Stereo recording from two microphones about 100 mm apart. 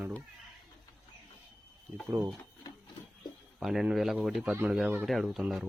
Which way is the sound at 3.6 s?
5° right (ahead or behind).